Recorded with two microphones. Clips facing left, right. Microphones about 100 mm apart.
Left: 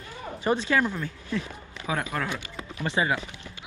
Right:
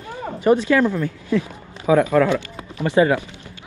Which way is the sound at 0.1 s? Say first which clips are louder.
Right 8 dB; 50° right (ahead or behind).